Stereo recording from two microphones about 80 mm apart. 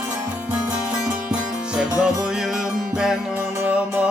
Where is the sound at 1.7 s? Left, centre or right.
Centre.